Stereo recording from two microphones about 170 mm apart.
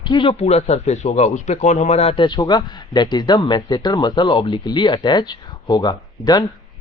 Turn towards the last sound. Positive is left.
turn(degrees=25)  # may be behind; listen again after turning